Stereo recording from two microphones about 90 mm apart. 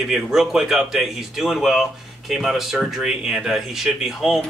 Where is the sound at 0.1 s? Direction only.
5° right (ahead or behind).